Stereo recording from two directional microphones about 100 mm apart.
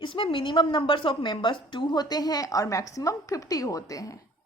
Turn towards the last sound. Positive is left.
turn(degrees=35)  # may be behind; listen again after turning